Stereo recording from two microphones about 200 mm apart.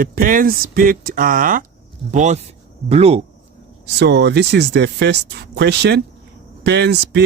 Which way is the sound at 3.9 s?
60° right (ahead or behind).